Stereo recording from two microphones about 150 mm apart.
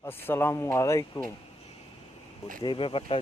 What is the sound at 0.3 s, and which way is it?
Speech, 15° left (ahead or behind).